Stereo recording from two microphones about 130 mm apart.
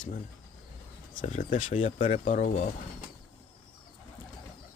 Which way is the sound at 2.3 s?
90° left.